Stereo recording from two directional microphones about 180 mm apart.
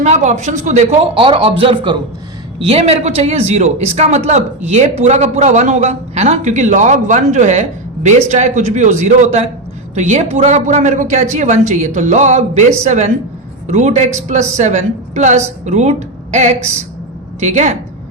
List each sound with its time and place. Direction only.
0.0 s a man's voice: 40° right (ahead or behind)